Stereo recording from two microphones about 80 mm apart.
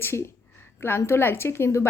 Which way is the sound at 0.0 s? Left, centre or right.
Left.